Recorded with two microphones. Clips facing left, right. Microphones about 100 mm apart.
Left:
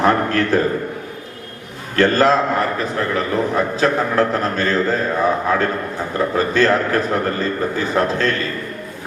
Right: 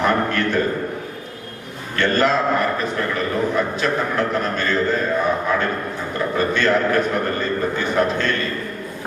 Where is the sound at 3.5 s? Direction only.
35° left (ahead or behind).